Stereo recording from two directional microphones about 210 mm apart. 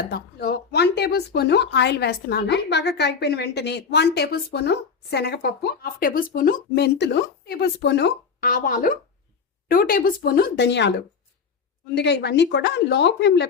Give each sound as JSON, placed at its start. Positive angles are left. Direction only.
{"t": 0.1, "sound": "speech", "side_deg": 50}
{"t": 11.9, "sound": "a woman's voice", "side_deg": 55}